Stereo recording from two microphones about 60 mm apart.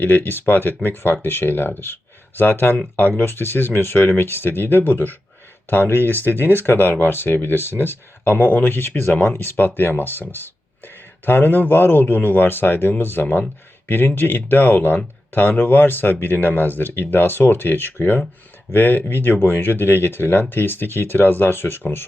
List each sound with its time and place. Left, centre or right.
0.0 s speech: left